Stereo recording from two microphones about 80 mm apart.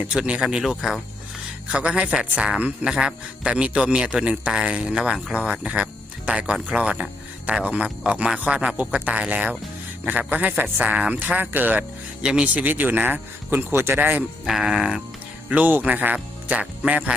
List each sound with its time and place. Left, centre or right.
0.1 s speech: centre
1.6 s a man's voice: centre
12.2 s speech: centre
12.6 s a man's voice: right
14.0 s a man's voice: centre
14.4 s speech: centre
15.4 s speech: centre